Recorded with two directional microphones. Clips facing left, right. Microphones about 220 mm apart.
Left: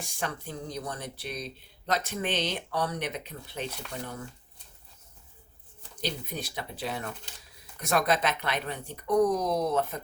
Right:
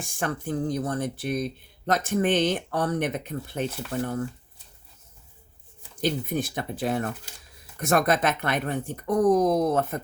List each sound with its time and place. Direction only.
0.0 s speech: 50° right (ahead or behind)
6.0 s speech: 50° right (ahead or behind)